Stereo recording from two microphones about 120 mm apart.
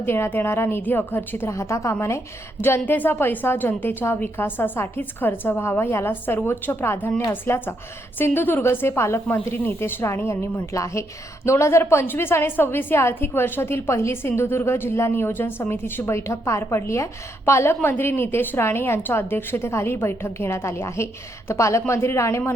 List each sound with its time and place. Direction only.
0.0 s a woman's voice: 20° left (ahead or behind)